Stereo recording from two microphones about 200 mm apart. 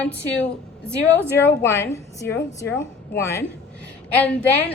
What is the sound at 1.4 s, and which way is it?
A woman's voice, 10° left (ahead or behind).